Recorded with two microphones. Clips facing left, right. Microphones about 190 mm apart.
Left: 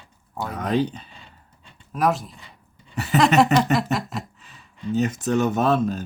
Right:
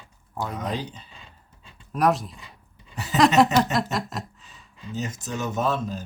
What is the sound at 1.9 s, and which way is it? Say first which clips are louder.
Speech: even; centre (ahead or behind).